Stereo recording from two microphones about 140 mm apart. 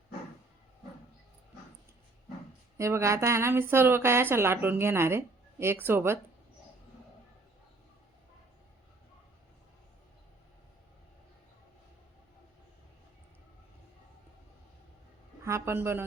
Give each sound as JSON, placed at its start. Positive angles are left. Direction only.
{"t": 2.7, "sound": "a woman's voice", "side_deg": -20}
{"t": 15.4, "sound": "speech", "side_deg": -20}